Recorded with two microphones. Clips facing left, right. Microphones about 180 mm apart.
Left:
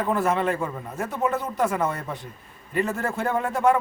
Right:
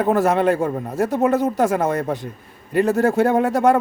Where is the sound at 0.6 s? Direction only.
40° right (ahead or behind).